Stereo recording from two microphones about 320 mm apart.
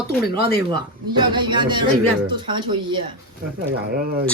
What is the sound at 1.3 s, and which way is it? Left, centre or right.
Speech, centre.